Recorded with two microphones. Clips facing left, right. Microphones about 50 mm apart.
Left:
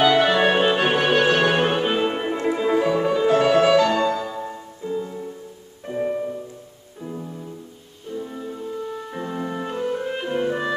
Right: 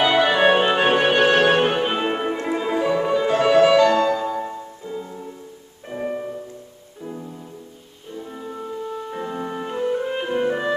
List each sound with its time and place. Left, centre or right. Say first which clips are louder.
0.0 s music: even; centre
4.2 s music: right 4 dB; centre
4.5 s music: left 2 dB; centre
5.9 s music: left 3 dB; centre
8.1 s music: left 2 dB; centre